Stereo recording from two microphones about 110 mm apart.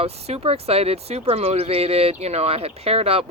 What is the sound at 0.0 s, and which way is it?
Speech, 70° right (ahead or behind).